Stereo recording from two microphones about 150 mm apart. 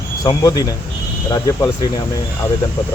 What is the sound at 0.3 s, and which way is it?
Speech, 25° left (ahead or behind).